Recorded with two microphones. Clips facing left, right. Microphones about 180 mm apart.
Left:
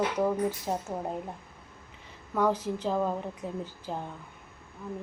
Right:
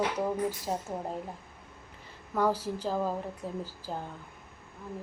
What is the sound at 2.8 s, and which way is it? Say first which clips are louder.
Speech: left 2 dB; 5° right (ahead or behind).